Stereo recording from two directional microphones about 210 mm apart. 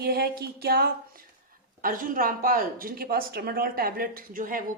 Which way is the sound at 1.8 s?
40° right (ahead or behind).